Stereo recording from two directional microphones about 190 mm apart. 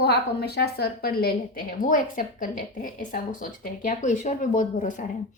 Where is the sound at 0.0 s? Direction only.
60° left (ahead or behind).